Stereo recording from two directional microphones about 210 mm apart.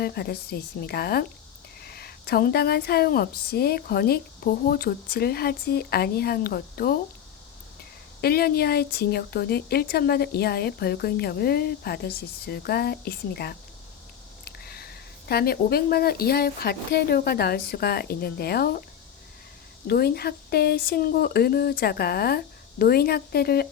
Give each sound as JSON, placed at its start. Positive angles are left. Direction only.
{"t": 0.0, "sound": "speech", "side_deg": 50}
{"t": 8.2, "sound": "speech", "side_deg": 45}
{"t": 19.9, "sound": "speech", "side_deg": 50}